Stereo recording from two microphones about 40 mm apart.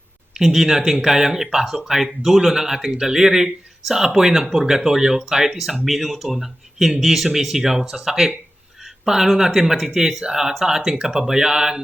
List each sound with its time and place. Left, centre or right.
0.3 s speech: centre